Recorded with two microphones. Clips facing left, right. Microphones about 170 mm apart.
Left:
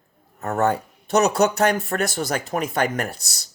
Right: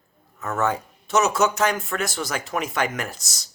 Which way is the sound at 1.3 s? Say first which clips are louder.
Left 3 dB; 60° left (ahead or behind).